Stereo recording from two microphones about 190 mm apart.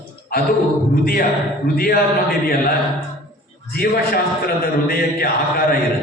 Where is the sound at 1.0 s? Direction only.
50° left (ahead or behind).